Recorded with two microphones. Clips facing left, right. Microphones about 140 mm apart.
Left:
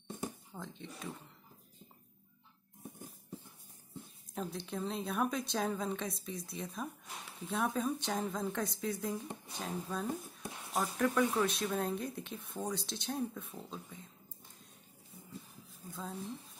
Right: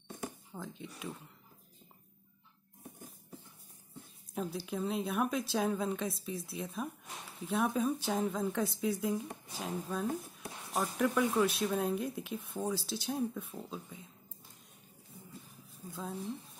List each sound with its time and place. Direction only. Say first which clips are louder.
0.6 s speech: right 3 dB; 5° right (ahead or behind)
4.4 s speech: right 3 dB; 5° right (ahead or behind)
15.9 s speech: right 2 dB; 10° right (ahead or behind)